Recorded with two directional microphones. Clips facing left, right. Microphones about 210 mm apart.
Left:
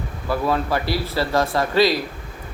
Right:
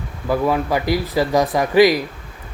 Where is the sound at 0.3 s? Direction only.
15° right (ahead or behind).